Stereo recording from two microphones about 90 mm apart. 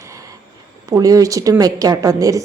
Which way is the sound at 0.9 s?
40° right (ahead or behind).